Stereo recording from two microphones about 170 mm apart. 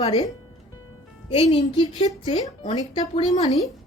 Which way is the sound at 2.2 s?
40° left (ahead or behind).